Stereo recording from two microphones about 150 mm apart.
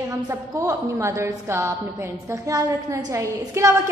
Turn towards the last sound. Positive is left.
turn(degrees=-20)  # may be behind; listen again after turning